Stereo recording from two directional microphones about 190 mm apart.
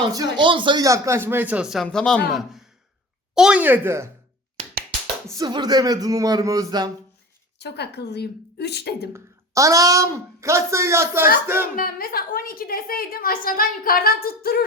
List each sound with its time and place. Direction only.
0.0 s speech: 20° right (ahead or behind)
5.4 s speech: 20° right (ahead or behind)
7.6 s a woman's voice: 60° left (ahead or behind)
9.1 s speech: 15° right (ahead or behind)
11.8 s a woman's voice: 50° left (ahead or behind)